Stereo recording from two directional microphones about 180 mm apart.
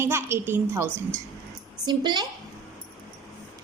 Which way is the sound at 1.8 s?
25° right (ahead or behind).